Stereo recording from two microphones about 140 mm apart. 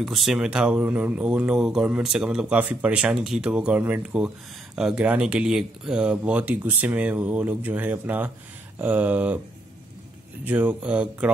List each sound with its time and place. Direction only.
0.0 s speech: centre (ahead or behind)
10.4 s speech: 10° right (ahead or behind)